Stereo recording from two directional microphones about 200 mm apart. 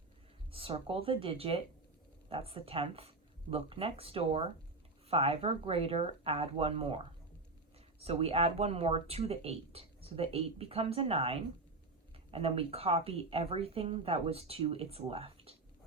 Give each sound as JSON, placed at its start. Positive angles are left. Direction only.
{"t": 0.5, "sound": "speech", "side_deg": -25}